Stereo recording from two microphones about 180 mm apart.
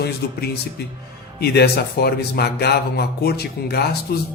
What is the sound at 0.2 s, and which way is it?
Speech, 60° left (ahead or behind).